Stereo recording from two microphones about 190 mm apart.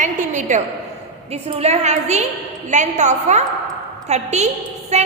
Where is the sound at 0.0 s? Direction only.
40° right (ahead or behind).